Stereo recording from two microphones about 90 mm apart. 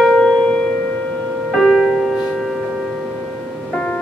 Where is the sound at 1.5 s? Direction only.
Centre (ahead or behind).